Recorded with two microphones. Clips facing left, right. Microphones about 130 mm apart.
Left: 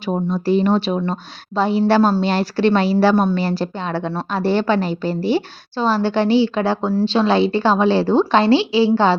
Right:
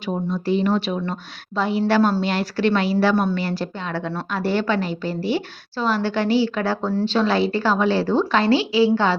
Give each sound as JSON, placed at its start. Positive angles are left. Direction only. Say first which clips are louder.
{"t": 0.0, "sound": "a woman's voice", "louder": "left 4 dB", "side_deg": 40}